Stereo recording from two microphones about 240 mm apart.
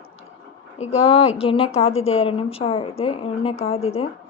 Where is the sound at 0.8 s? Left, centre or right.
Left.